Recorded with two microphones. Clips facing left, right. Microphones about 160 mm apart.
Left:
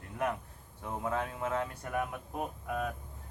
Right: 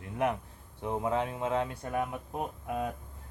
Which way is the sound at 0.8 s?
20° right (ahead or behind).